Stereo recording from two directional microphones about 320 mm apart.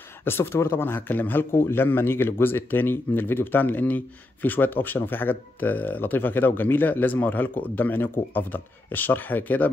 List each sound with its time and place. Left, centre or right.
0.2 s a man's voice: centre